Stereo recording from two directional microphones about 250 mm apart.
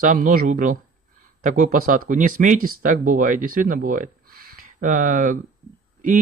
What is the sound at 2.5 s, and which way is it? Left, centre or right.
Speech, right.